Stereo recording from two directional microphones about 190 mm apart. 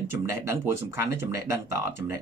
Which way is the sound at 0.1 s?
15° right (ahead or behind).